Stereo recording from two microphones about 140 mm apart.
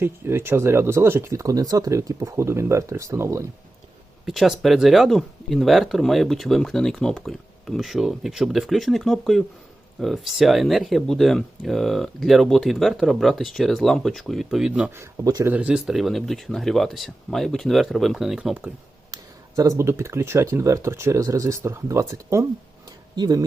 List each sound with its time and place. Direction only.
0.0 s speech: 15° right (ahead or behind)
4.3 s speech: centre (ahead or behind)
14.8 s speech: 20° right (ahead or behind)
15.5 s speech: 5° right (ahead or behind)
19.1 s speech: 25° right (ahead or behind)